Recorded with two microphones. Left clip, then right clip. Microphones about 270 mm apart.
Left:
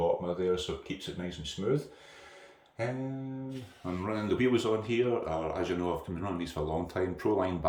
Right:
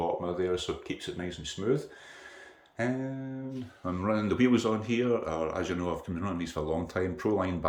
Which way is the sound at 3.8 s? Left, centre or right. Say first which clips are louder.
Right 4 dB; centre.